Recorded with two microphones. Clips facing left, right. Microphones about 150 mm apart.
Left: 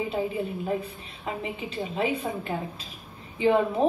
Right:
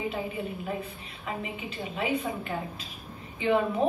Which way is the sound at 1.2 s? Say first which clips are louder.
Left 3 dB; 30° left (ahead or behind).